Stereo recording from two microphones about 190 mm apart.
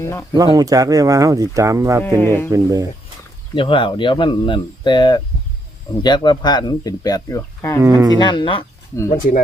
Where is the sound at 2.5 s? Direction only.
20° right (ahead or behind).